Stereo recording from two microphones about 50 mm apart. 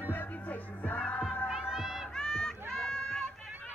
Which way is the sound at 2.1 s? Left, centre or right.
Centre.